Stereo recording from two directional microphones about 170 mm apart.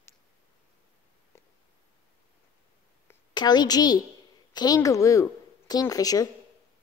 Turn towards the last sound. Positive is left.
turn(degrees=20)  # may be behind; listen again after turning